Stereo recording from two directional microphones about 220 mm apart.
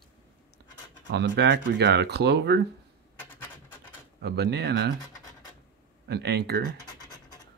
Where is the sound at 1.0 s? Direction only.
50° right (ahead or behind).